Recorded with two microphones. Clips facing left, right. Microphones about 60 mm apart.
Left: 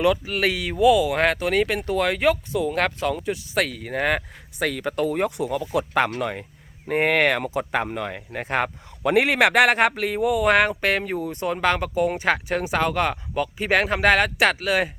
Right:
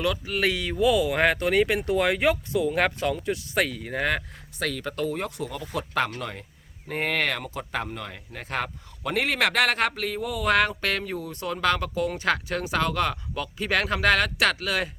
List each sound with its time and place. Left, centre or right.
0.3 s a man's voice: centre